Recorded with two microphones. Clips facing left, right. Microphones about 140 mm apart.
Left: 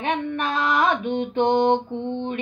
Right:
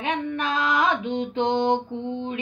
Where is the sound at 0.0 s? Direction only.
55° left (ahead or behind).